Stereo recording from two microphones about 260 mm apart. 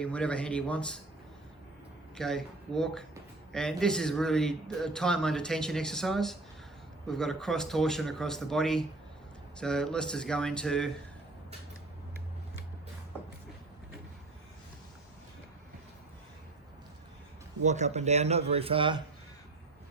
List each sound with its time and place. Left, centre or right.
0.0 s a man's voice: centre
2.1 s a man's voice: centre
17.6 s speech: right